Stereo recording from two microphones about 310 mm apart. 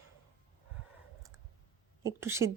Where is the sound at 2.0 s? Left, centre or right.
Centre.